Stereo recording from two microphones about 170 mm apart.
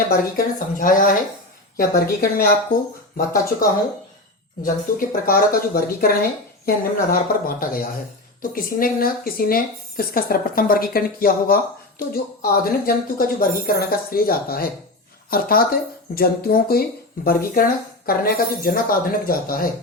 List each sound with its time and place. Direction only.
0.1 s speech: 60° left (ahead or behind)
4.6 s speech: 55° left (ahead or behind)